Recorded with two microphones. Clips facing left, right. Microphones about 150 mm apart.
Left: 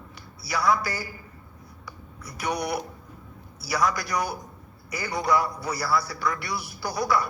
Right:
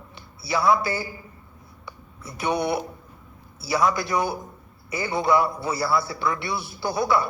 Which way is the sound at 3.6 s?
25° right (ahead or behind).